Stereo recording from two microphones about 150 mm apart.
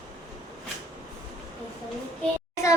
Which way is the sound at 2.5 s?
20° left (ahead or behind).